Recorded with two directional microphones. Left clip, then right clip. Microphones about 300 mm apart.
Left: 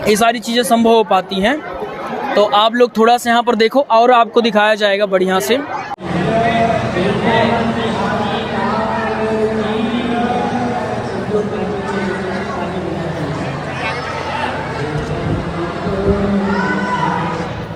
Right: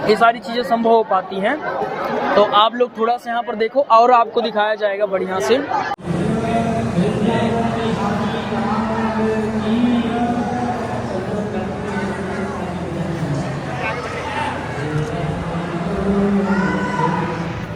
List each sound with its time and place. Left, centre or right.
0.1 s speech: left